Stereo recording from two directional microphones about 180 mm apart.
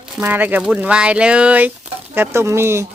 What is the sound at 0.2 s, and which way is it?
Speech, 10° right (ahead or behind).